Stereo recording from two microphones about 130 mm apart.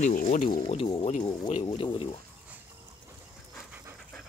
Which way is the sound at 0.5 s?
35° left (ahead or behind).